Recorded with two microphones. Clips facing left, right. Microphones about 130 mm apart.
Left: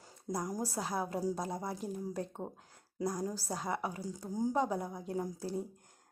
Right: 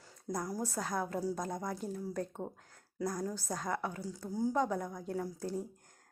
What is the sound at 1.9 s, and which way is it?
A woman's voice, 15° left (ahead or behind).